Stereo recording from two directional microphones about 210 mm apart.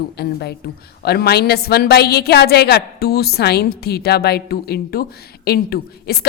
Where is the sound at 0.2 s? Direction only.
50° left (ahead or behind).